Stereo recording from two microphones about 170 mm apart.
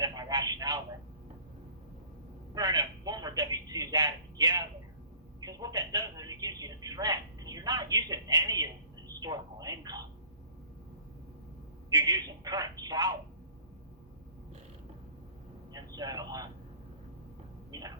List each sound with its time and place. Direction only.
0.0 s a sound: 25° right (ahead or behind)
2.6 s a man's voice: 20° right (ahead or behind)
11.9 s a man's voice: 25° right (ahead or behind)
15.7 s speech: 20° right (ahead or behind)
17.7 s speech: 20° right (ahead or behind)